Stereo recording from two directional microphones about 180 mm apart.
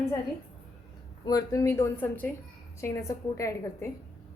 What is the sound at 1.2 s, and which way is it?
A woman's voice, 20° left (ahead or behind).